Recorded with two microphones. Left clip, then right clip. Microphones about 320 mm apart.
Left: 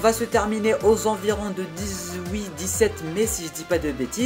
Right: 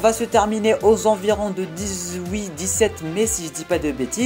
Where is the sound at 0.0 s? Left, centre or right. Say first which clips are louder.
Right 3 dB; centre.